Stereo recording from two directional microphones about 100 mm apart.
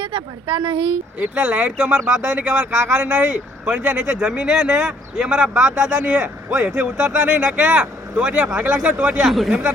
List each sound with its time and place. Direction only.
0.0 s speech: 60° right (ahead or behind)
1.2 s speech: 15° right (ahead or behind)